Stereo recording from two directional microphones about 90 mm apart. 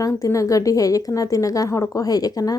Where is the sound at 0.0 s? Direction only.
40° left (ahead or behind).